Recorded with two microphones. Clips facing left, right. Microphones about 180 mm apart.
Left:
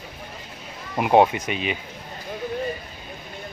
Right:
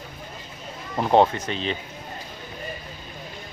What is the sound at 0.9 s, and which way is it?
Speech, 10° left (ahead or behind).